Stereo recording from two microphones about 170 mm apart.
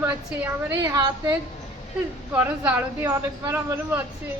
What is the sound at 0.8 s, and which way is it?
Speech, 20° right (ahead or behind).